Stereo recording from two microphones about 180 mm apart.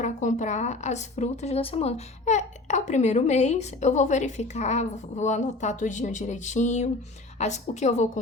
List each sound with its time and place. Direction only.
0.0 s a woman's voice: 45° left (ahead or behind)